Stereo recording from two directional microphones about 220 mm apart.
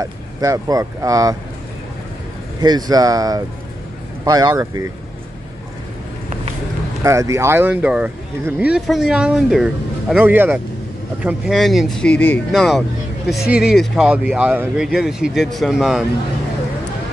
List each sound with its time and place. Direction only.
0.0 s speech: 15° right (ahead or behind)
2.6 s speech: 20° right (ahead or behind)
7.0 s speech: 15° right (ahead or behind)